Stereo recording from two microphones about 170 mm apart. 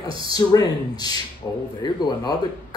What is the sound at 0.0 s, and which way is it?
Speech, 20° left (ahead or behind).